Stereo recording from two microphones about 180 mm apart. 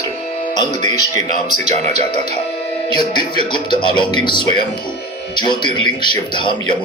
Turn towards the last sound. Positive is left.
turn(degrees=25)  # may be behind; listen again after turning